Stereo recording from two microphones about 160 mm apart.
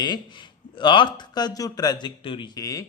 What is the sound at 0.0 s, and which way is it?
Speech, 30° left (ahead or behind).